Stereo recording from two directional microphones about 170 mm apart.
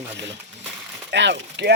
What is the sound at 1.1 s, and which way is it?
Speech, 90° right.